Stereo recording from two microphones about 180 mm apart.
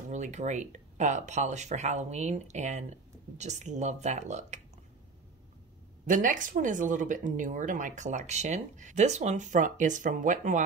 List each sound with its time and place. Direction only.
0.1 s speech: 40° right (ahead or behind)
6.0 s speech: 45° right (ahead or behind)